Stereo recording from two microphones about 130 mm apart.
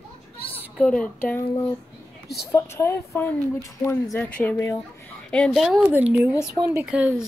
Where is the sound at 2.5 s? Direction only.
20° left (ahead or behind).